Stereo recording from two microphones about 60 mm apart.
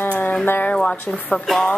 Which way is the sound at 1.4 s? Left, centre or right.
Centre.